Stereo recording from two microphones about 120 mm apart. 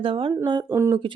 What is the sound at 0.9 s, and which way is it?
Speech, 45° right (ahead or behind).